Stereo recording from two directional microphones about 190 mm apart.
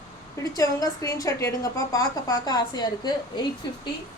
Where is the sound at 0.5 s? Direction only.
20° left (ahead or behind).